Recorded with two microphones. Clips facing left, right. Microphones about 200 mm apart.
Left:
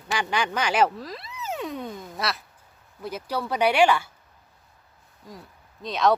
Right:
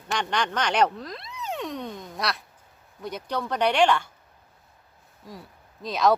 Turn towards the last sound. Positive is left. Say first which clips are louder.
# even
turn(degrees=0)  # may be behind; listen again after turning